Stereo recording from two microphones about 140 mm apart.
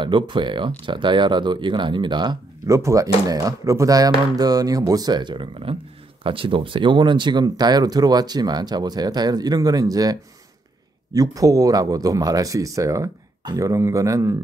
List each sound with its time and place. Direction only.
0.0 s speech: 35° right (ahead or behind)
2.7 s speech: 20° right (ahead or behind)
11.1 s speech: 25° right (ahead or behind)